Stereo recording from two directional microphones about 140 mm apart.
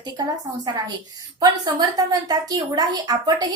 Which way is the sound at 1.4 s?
30° right (ahead or behind).